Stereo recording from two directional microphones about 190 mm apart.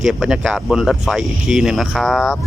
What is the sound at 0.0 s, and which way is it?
Speech, 5° right (ahead or behind).